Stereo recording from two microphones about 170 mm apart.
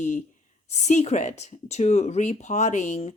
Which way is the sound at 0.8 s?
40° left (ahead or behind).